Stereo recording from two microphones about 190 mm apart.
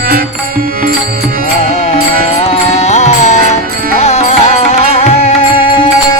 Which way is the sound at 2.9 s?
35° left (ahead or behind).